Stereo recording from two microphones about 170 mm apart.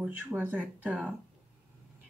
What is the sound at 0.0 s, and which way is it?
Speech, 10° right (ahead or behind).